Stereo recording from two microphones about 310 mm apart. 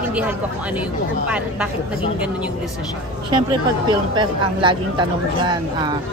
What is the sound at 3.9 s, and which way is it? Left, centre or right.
Speech, centre.